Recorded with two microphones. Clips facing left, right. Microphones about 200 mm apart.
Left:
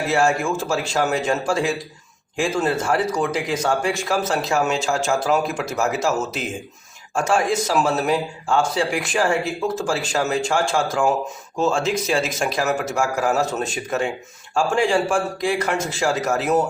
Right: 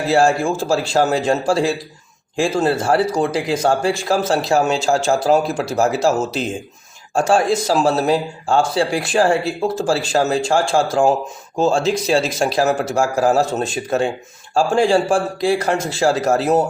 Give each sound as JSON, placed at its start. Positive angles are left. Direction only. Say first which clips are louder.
{"t": 0.1, "sound": "a man's voice", "louder": "right 5 dB", "side_deg": -30}